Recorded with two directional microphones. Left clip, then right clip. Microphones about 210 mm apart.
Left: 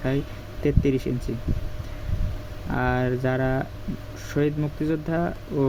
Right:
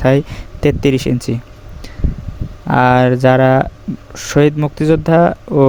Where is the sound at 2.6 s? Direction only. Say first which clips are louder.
Right 15 dB; 50° right (ahead or behind).